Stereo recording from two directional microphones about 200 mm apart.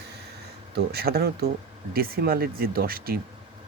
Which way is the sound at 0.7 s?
50° right (ahead or behind).